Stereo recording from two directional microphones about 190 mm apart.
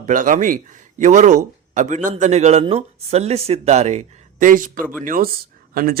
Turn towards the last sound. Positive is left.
turn(degrees=-50)  # may be behind; listen again after turning